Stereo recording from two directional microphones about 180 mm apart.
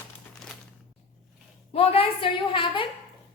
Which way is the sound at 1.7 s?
30° left (ahead or behind).